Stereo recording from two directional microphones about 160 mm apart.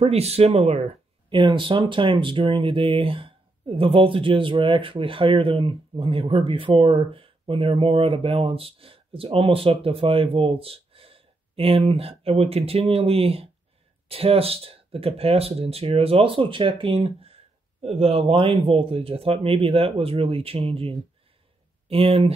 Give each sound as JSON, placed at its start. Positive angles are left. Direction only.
{"t": 0.0, "sound": "speech", "side_deg": -40}